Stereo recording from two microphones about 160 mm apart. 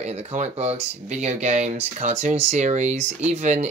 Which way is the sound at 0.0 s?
40° right (ahead or behind).